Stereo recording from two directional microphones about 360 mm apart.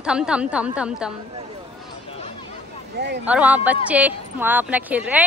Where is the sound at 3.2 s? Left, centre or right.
Centre.